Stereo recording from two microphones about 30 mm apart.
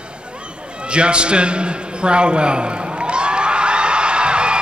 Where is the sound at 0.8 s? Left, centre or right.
Right.